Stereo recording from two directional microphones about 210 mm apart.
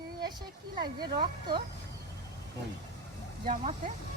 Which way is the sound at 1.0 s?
20° right (ahead or behind).